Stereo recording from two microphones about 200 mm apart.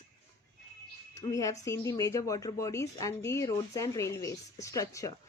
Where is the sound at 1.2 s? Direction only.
15° left (ahead or behind).